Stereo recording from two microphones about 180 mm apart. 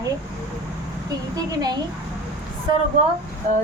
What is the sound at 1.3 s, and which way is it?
Speech, 20° right (ahead or behind).